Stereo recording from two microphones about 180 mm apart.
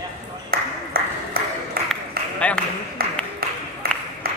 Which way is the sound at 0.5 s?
55° right (ahead or behind).